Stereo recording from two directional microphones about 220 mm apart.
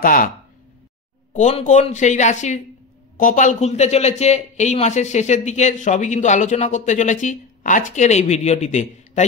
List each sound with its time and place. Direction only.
0.0 s speech: 40° left (ahead or behind)
1.3 s speech: 30° left (ahead or behind)